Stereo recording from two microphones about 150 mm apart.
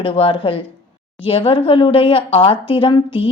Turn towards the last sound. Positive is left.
turn(degrees=35)  # may be behind; listen again after turning